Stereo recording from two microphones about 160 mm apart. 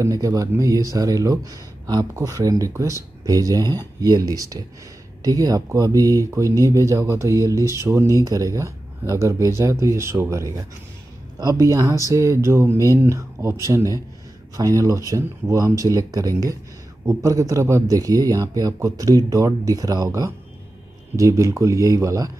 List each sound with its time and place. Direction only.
0.0 s speech: 20° right (ahead or behind)